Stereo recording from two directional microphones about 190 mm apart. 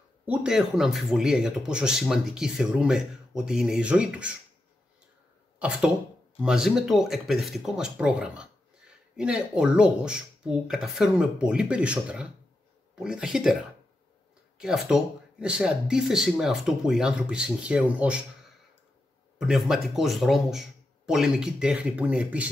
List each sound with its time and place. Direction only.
0.3 s speech: 5° right (ahead or behind)
6.4 s speech: 5° right (ahead or behind)
14.6 s speech: 5° right (ahead or behind)
19.3 s speech: centre (ahead or behind)